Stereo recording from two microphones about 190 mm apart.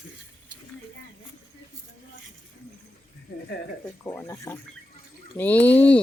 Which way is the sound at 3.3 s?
60° left (ahead or behind).